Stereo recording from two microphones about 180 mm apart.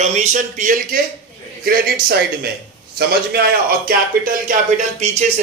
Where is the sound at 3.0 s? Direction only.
60° right (ahead or behind); by 5.4 s 40° right (ahead or behind).